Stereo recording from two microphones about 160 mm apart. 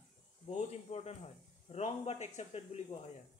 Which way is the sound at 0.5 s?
40° left (ahead or behind).